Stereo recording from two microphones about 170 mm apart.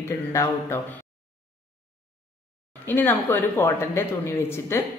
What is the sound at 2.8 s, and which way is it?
A woman's voice, 10° left (ahead or behind).